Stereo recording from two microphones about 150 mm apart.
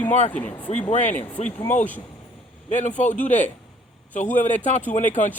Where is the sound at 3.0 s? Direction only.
55° left (ahead or behind).